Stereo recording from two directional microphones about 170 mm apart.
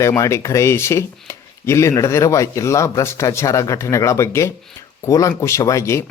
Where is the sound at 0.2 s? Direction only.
15° left (ahead or behind).